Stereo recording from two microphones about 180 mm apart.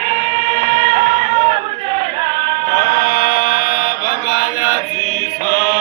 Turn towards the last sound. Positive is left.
turn(degrees=45)  # may be behind; listen again after turning